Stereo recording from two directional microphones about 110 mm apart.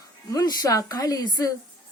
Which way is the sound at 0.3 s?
35° left (ahead or behind).